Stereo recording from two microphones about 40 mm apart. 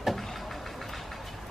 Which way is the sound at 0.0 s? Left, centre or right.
Centre.